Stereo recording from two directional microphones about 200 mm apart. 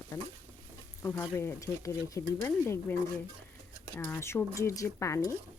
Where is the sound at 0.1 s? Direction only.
20° left (ahead or behind).